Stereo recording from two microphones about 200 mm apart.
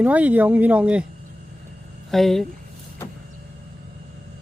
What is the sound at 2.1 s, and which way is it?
Speech, centre (ahead or behind).